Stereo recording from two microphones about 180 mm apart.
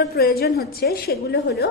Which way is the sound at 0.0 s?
60° left (ahead or behind).